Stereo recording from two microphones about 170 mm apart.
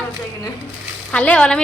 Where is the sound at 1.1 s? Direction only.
5° left (ahead or behind).